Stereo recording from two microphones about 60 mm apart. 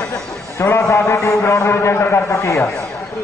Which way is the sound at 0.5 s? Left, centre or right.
Left.